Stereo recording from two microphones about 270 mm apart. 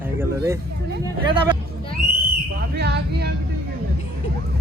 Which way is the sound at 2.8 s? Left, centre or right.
Right.